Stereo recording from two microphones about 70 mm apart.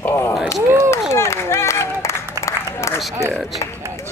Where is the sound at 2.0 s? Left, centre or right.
Left.